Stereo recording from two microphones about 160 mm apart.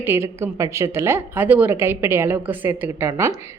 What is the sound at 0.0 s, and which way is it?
A woman's voice, 15° right (ahead or behind).